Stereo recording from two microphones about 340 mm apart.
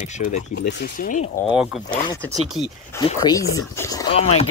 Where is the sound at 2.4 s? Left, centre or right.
Centre.